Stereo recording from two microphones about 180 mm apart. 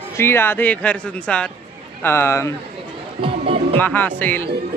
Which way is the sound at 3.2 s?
30° right (ahead or behind).